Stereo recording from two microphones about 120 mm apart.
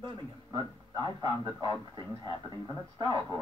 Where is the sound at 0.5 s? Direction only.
40° right (ahead or behind).